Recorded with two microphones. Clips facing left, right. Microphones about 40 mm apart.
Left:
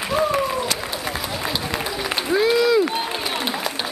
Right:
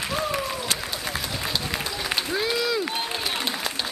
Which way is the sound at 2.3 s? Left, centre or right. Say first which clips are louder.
Left 10 dB; centre.